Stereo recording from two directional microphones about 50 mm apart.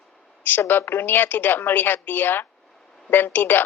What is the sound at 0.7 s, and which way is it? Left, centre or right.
Speech, left.